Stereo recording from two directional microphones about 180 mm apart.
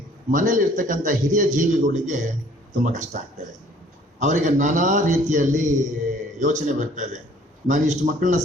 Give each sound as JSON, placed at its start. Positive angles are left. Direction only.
{"t": 0.3, "sound": "a man's voice", "side_deg": -50}
{"t": 4.2, "sound": "a man's voice", "side_deg": -45}